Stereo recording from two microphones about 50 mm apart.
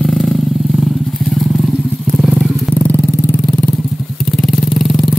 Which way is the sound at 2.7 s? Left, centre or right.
Left.